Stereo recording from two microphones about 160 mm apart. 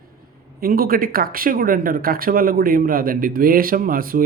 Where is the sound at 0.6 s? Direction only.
65° right (ahead or behind).